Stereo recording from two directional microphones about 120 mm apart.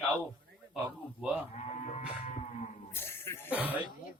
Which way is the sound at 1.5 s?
70° left (ahead or behind).